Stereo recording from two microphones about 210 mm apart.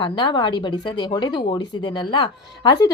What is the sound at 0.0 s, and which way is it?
A woman's voice, 20° left (ahead or behind).